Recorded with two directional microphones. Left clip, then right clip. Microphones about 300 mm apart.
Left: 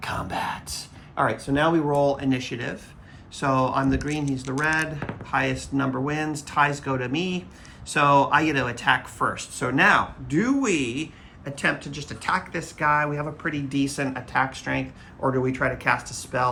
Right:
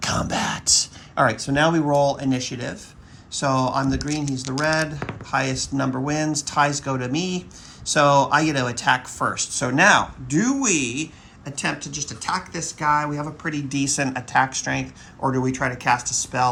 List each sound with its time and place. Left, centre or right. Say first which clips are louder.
0.0 s speech: right 4 dB; right
4.3 s speech: right 2 dB; right